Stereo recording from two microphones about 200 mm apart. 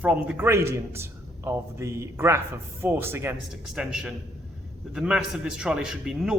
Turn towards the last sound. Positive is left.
turn(degrees=-5)  # may be behind; listen again after turning